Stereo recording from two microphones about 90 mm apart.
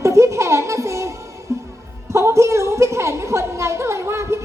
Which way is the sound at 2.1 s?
30° right (ahead or behind).